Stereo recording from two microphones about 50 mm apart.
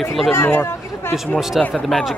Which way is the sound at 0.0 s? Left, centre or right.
Centre.